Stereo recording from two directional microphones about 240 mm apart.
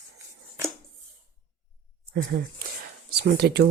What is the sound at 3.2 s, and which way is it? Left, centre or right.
Speech, right.